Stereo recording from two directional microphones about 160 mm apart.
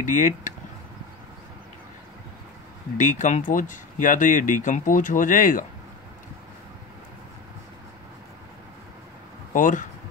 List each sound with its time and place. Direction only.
0.0 s speech: 55° left (ahead or behind)
3.0 s speech: 50° left (ahead or behind)
9.5 s speech: 55° left (ahead or behind)